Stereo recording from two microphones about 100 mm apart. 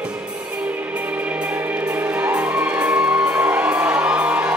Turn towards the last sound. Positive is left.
turn(degrees=-15)  # may be behind; listen again after turning